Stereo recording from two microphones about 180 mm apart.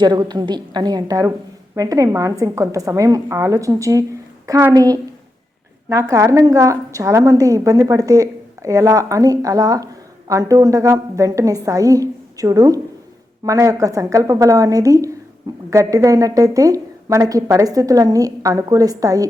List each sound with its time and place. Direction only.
0.0 s a woman's voice: 25° right (ahead or behind)